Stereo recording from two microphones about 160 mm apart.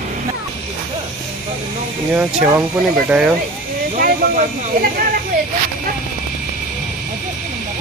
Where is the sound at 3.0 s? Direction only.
5° right (ahead or behind).